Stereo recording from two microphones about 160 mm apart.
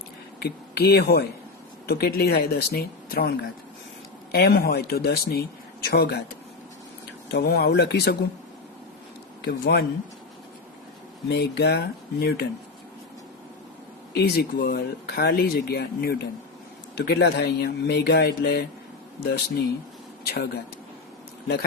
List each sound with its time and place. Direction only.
0.3 s speech: 80° left
7.3 s speech: 80° left
9.4 s speech: 85° left
11.3 s speech: 90° left
14.1 s speech: 80° left
16.9 s speech: 90° left; by 20.6 s 75° left (ahead or behind)